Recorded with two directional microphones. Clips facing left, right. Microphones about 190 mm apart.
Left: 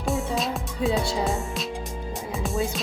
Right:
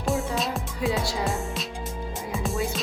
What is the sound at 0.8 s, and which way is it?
Speech, 25° left (ahead or behind).